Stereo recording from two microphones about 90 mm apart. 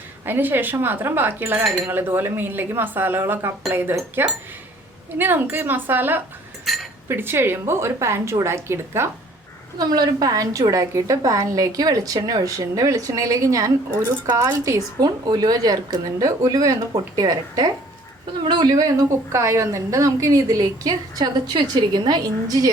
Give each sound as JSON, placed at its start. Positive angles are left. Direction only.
{"t": 0.3, "sound": "a woman's voice", "side_deg": -25}
{"t": 9.7, "sound": "a woman's voice", "side_deg": -45}
{"t": 19.1, "sound": "a woman's voice", "side_deg": -35}